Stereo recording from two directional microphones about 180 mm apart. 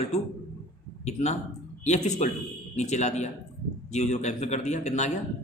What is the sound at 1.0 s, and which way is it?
Speech, 40° left (ahead or behind).